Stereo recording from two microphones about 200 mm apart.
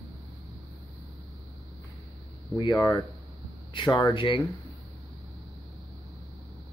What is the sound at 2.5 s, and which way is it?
Speech, 20° left (ahead or behind).